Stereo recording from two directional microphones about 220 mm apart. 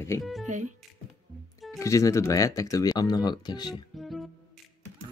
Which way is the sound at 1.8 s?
15° left (ahead or behind).